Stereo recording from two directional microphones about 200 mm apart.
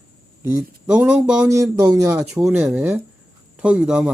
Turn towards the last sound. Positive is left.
turn(degrees=-5)  # may be behind; listen again after turning